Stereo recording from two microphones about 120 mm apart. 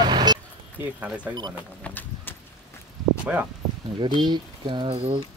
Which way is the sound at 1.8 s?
15° left (ahead or behind).